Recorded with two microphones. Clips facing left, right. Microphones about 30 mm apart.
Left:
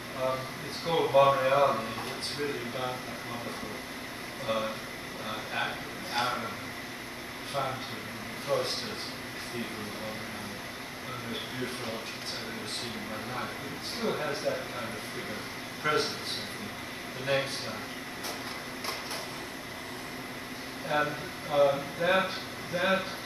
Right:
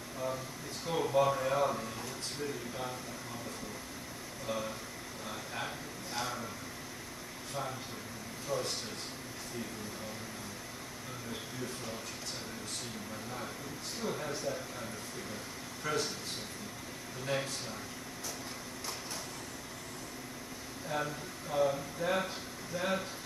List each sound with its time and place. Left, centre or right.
0.8 s speech: left
4.5 s speech: left
8.5 s speech: left
14.0 s speech: left
17.3 s speech: left
20.9 s speech: left